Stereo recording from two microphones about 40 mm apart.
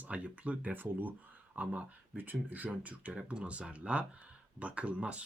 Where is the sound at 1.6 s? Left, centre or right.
Right.